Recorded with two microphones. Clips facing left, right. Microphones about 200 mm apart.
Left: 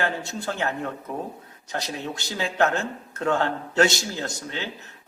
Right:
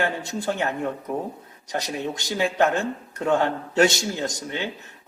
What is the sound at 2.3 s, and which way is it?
A man's voice, 15° right (ahead or behind).